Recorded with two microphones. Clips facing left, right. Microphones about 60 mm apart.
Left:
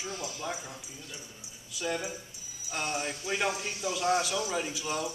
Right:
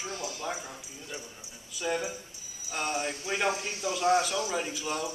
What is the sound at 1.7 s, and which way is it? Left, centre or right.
Speech, centre.